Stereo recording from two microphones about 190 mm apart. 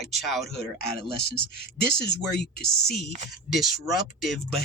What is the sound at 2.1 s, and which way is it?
Speech, 60° left (ahead or behind).